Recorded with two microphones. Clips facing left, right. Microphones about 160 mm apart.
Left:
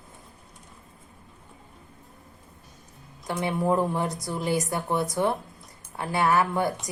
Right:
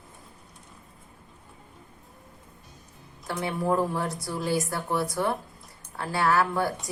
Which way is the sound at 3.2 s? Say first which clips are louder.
Left 2 dB; 20° left (ahead or behind).